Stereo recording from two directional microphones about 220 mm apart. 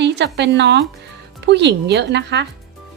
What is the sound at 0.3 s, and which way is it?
A woman's voice, 50° right (ahead or behind).